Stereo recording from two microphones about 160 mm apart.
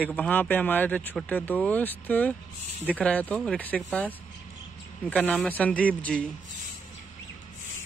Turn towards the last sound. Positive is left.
turn(degrees=5)  # may be behind; listen again after turning